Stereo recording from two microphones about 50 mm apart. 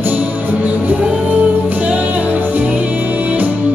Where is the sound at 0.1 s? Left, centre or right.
Right.